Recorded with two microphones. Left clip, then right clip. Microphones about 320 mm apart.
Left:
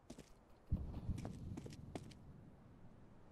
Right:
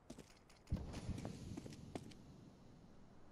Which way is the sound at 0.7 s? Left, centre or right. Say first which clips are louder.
Right 2 dB; right.